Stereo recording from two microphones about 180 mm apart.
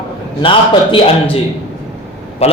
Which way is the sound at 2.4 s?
35° left (ahead or behind).